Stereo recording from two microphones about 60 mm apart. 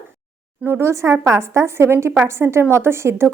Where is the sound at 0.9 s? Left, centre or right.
Right.